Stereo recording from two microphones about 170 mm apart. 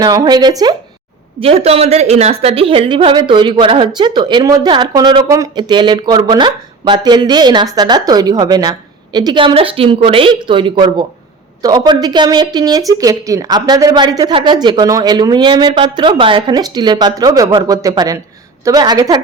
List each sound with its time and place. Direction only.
0.0 s a woman's voice: 25° right (ahead or behind)
1.4 s a woman's voice: 35° right (ahead or behind)